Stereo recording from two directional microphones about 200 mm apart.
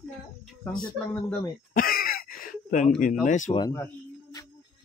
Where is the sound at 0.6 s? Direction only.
10° left (ahead or behind).